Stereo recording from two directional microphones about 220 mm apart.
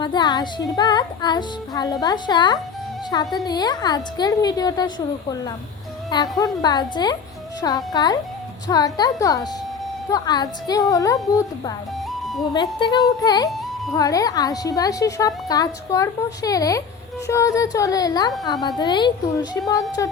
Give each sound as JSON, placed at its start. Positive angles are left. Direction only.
{"t": 0.0, "sound": "music", "side_deg": 20}
{"t": 0.8, "sound": "a woman's voice", "side_deg": 20}